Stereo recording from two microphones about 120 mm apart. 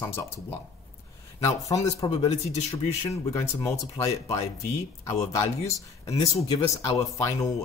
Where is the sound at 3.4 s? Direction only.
25° left (ahead or behind).